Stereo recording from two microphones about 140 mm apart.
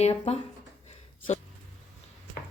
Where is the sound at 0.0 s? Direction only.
45° left (ahead or behind).